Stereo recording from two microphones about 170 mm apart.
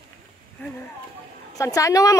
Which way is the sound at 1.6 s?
20° left (ahead or behind).